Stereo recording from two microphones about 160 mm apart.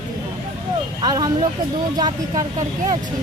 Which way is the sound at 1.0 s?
25° right (ahead or behind).